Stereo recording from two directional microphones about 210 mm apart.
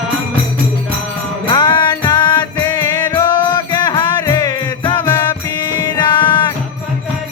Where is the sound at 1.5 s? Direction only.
20° left (ahead or behind).